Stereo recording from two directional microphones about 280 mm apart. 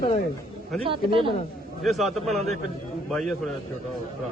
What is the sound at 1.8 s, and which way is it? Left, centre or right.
A man's voice, centre.